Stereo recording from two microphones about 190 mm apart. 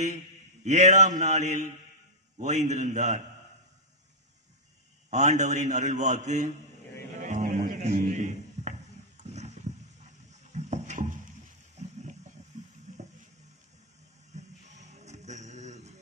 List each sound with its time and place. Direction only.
0.7 s a man's voice: 40° right (ahead or behind)
5.1 s a man's voice: 40° right (ahead or behind)
7.2 s music: 40° right (ahead or behind)
7.6 s a sound: 40° right (ahead or behind)
14.3 s music: 35° right (ahead or behind)